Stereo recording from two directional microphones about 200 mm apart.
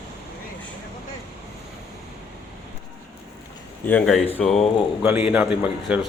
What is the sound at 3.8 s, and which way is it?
Speech, 5° left (ahead or behind).